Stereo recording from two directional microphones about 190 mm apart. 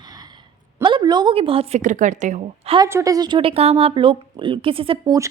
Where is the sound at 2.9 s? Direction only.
15° right (ahead or behind).